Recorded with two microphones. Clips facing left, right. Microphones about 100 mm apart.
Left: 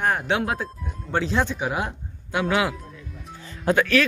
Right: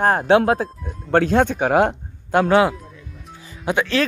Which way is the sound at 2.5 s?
35° right (ahead or behind).